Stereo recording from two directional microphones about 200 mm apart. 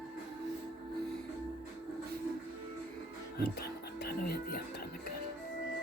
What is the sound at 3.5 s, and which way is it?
Music, 50° left (ahead or behind).